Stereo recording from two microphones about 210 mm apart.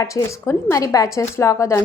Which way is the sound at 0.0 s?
15° left (ahead or behind).